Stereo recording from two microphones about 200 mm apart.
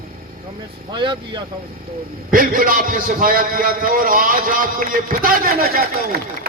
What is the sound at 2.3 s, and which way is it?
A man's voice, 45° right (ahead or behind).